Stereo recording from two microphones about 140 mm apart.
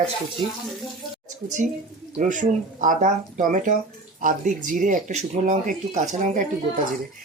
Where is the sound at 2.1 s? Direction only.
65° right (ahead or behind).